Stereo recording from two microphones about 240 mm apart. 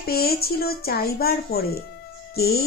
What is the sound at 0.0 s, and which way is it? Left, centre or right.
Speech, left.